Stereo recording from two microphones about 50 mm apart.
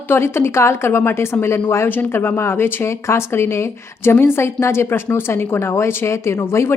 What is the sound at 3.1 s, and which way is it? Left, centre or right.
A woman's voice, left.